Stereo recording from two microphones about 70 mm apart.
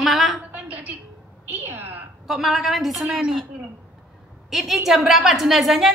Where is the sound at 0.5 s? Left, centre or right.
Right.